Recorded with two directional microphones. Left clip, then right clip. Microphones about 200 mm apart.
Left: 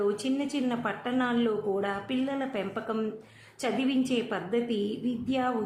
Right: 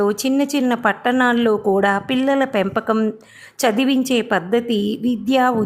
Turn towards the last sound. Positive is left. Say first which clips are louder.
# right 13 dB
turn(degrees=-50)  # may be behind; listen again after turning